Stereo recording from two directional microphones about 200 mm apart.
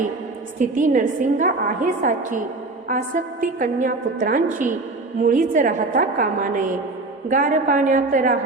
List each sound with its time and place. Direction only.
0.6 s a woman's voice: 40° right (ahead or behind)